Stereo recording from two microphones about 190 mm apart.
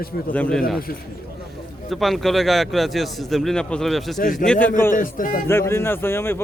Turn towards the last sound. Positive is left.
turn(degrees=10)  # may be behind; listen again after turning